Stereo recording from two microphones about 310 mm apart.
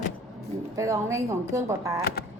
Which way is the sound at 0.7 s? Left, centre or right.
Centre.